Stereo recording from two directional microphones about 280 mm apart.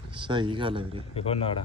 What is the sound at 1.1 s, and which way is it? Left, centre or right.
Speech, centre.